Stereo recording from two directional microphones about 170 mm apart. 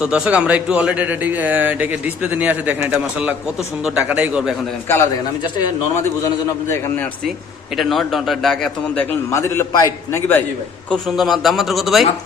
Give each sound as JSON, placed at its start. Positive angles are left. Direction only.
{"t": 0.0, "sound": "speech", "side_deg": -5}
{"t": 4.9, "sound": "a man's voice", "side_deg": 20}
{"t": 7.8, "sound": "a man's voice", "side_deg": 0}
{"t": 10.8, "sound": "speech", "side_deg": 0}